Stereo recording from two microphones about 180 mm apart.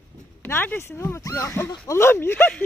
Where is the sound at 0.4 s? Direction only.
10° left (ahead or behind).